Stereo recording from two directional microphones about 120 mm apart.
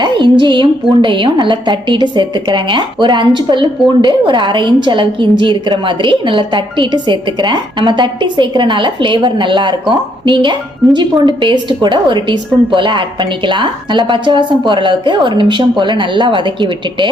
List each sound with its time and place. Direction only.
0.0 s a woman's voice: 40° right (ahead or behind)